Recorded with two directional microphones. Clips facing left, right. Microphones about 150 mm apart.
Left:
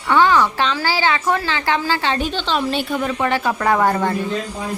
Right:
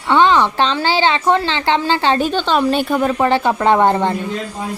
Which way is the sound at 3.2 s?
30° right (ahead or behind).